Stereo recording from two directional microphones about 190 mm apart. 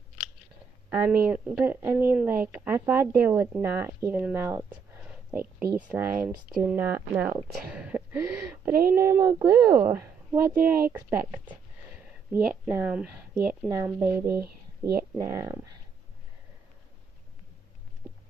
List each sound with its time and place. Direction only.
0.8 s speech: 10° right (ahead or behind)